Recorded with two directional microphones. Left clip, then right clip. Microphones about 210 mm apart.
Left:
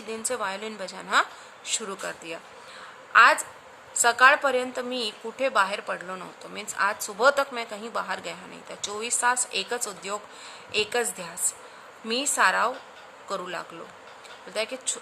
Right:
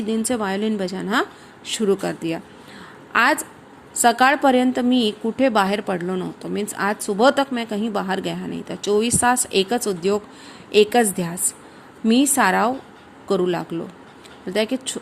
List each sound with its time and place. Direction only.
0.1 s a woman's voice: 25° right (ahead or behind)